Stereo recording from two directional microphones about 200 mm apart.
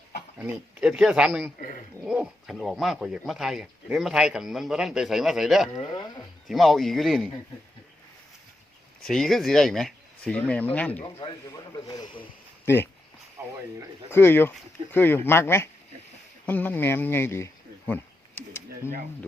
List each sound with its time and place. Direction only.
0.3 s speech: 5° right (ahead or behind)
5.7 s speech: 25° left (ahead or behind)
6.5 s speech: centre (ahead or behind)
9.0 s speech: centre (ahead or behind)
13.4 s a sound: 15° right (ahead or behind)
14.1 s speech: 10° left (ahead or behind)